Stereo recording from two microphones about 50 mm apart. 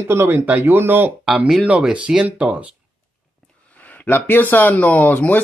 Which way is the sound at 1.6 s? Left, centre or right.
Right.